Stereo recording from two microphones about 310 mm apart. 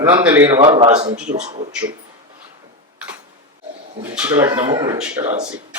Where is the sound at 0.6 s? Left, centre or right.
Centre.